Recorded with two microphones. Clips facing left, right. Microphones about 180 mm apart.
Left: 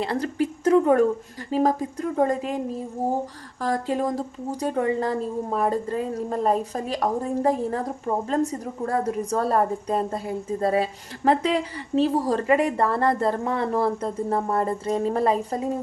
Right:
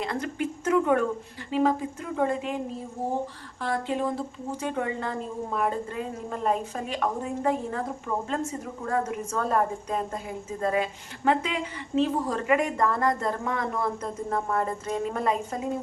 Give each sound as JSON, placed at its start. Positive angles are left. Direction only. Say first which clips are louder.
{"t": 0.0, "sound": "a sound", "louder": "left 5 dB", "side_deg": 35}
{"t": 1.5, "sound": "a woman's voice", "louder": "left 2 dB", "side_deg": 40}
{"t": 3.6, "sound": "a woman's voice", "louder": "left 3 dB", "side_deg": 40}